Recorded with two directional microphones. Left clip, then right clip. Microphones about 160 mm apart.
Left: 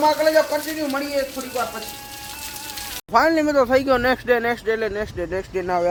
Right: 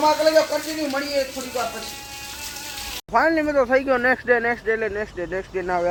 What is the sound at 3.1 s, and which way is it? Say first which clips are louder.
Speech: left 2 dB; 20° left (ahead or behind).